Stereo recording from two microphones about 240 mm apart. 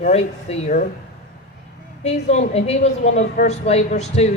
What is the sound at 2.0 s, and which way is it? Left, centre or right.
A woman's voice, left.